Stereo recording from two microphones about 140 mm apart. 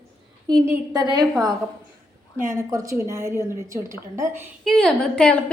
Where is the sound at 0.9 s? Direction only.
30° right (ahead or behind).